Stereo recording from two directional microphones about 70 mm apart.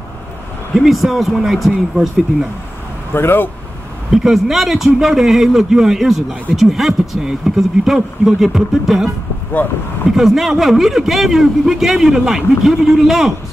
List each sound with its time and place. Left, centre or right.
0.7 s a man's voice: centre
3.1 s speech: left
4.1 s a man's voice: centre